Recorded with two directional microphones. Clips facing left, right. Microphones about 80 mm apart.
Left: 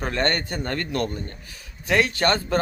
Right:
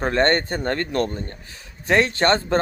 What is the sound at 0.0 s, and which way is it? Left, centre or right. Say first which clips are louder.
Speech: right 5 dB; right.